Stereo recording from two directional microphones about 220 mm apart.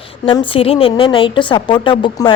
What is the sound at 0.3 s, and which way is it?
A woman's voice, 25° left (ahead or behind).